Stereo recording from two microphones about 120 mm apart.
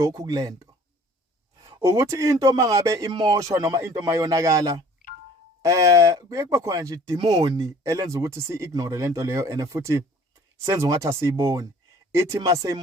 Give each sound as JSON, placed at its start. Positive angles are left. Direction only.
{"t": 0.0, "sound": "speech", "side_deg": -30}
{"t": 1.8, "sound": "speech", "side_deg": -25}